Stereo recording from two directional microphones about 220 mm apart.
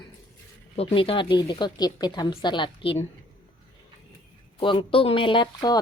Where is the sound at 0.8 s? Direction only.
25° left (ahead or behind).